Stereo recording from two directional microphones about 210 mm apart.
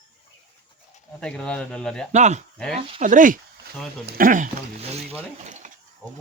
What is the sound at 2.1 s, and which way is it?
Speech, 35° right (ahead or behind).